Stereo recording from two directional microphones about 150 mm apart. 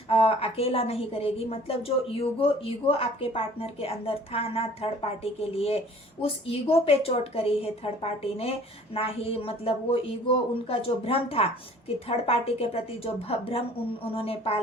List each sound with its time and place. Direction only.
0.1 s a woman's voice: 40° left (ahead or behind)